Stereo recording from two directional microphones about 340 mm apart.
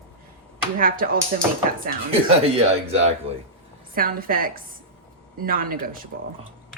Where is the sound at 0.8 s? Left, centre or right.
Right.